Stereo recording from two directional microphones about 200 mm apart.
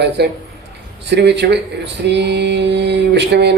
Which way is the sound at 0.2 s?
55° right (ahead or behind).